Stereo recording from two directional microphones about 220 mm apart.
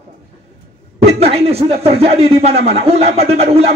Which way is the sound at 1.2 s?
30° right (ahead or behind).